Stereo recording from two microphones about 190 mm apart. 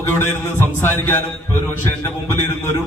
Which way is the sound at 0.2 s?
10° left (ahead or behind).